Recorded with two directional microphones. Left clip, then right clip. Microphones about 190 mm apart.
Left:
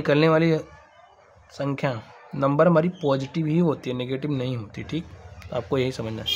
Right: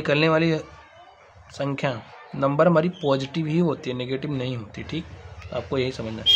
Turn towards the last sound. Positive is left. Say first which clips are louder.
# left 1 dB
turn(degrees=25)  # may be behind; listen again after turning